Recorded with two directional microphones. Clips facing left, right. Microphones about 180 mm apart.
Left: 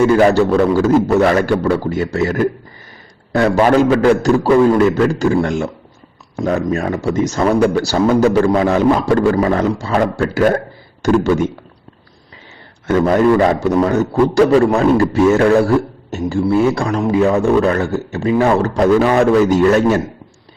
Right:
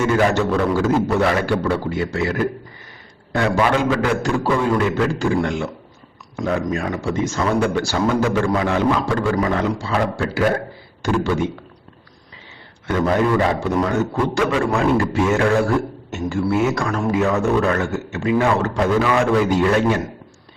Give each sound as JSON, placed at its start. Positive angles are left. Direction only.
{"t": 0.2, "sound": "a man's voice", "side_deg": 35}
{"t": 12.9, "sound": "a man's voice", "side_deg": 40}